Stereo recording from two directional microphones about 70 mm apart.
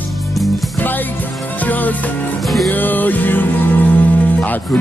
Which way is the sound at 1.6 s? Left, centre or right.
Left.